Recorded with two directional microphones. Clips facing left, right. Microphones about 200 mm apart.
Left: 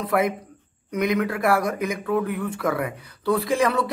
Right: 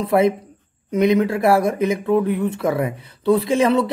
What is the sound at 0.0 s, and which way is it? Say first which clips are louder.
Speech: right 6 dB; 25° right (ahead or behind).